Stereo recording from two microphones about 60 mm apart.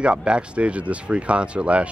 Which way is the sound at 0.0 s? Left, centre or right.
Centre.